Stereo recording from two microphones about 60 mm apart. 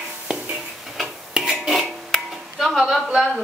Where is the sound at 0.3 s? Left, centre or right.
Centre.